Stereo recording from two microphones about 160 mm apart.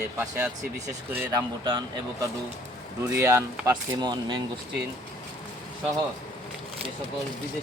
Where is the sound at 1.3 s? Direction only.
25° right (ahead or behind).